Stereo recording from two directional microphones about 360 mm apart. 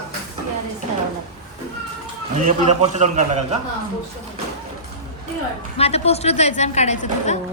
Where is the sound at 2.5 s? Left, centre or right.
Centre.